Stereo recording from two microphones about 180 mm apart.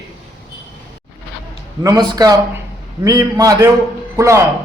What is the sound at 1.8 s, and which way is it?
A man's voice, 20° right (ahead or behind).